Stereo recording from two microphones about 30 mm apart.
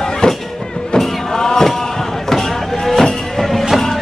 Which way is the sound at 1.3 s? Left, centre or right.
Centre.